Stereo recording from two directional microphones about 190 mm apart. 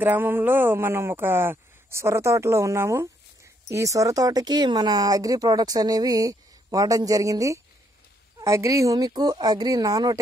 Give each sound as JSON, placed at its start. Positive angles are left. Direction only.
{"t": 0.0, "sound": "speech", "side_deg": -10}